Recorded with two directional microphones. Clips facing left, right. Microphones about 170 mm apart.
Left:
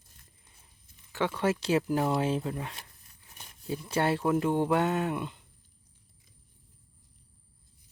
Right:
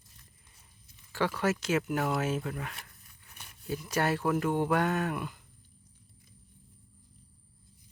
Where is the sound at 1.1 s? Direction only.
25° left (ahead or behind).